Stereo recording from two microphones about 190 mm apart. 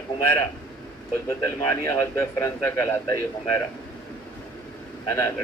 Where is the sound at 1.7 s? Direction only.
15° left (ahead or behind).